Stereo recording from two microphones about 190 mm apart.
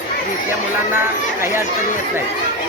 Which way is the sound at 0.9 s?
15° right (ahead or behind).